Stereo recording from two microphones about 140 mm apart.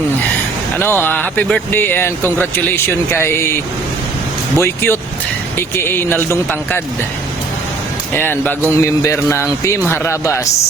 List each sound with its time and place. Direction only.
0.8 s speech: 15° left (ahead or behind)
4.6 s speech: 15° left (ahead or behind)
8.1 s a man's voice: 15° left (ahead or behind)